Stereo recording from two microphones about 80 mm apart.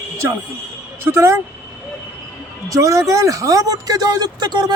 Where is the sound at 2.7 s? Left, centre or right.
Right.